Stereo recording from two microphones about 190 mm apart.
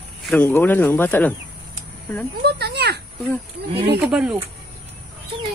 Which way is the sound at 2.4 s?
60° right (ahead or behind).